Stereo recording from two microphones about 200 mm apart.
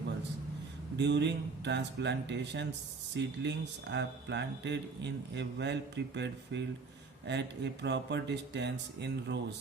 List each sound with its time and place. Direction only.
0.9 s speech: 60° right (ahead or behind)